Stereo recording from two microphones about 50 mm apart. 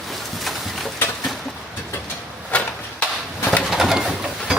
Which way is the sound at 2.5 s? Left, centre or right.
Left.